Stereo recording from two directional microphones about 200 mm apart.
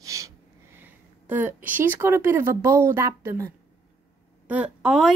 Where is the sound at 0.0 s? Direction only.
15° right (ahead or behind).